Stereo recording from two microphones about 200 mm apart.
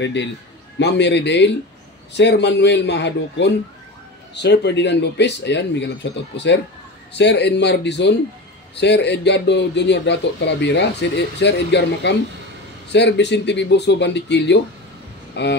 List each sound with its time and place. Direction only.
0.0 s speech: 60° left (ahead or behind)